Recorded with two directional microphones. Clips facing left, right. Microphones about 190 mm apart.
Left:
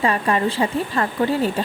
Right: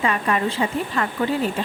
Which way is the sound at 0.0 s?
35° left (ahead or behind).